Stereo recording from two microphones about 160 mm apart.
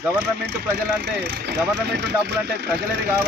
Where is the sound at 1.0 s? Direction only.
90° right.